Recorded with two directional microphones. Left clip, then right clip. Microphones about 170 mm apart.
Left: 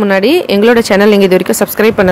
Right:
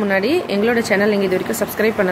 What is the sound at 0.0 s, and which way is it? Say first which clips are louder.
Speech: left 8 dB; 45° left (ahead or behind).